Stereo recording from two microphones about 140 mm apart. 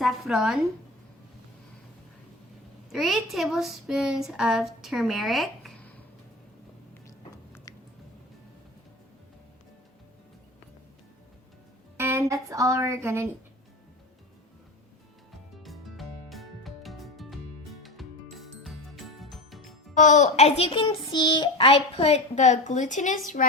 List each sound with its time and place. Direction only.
0.0 s speech: 5° right (ahead or behind)
2.9 s speech: centre (ahead or behind)
7.7 s a sound: 25° left (ahead or behind)
11.9 s speech: 15° right (ahead or behind)
15.6 s music: centre (ahead or behind)
19.9 s a child's voice: 60° left (ahead or behind)